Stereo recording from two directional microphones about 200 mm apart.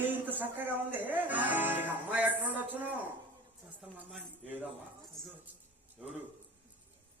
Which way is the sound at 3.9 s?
5° left (ahead or behind).